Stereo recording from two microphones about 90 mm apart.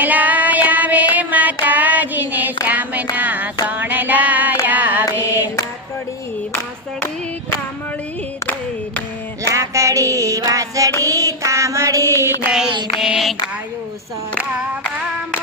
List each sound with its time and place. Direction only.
0.0 s child singing: 20° right (ahead or behind)
1.1 s music: 15° right (ahead or behind)
1.6 s child singing: 20° right (ahead or behind)
2.6 s a sound: 15° right (ahead or behind)
3.2 s music: 20° right (ahead or behind)
3.7 s a sound: 20° right (ahead or behind)
4.6 s music: 20° right (ahead or behind)
9.5 s child singing: 35° right (ahead or behind)
12.5 s mantra: 10° right (ahead or behind)
13.0 s child singing: 5° right (ahead or behind)